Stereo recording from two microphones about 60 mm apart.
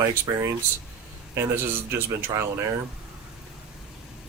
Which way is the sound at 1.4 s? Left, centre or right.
Right.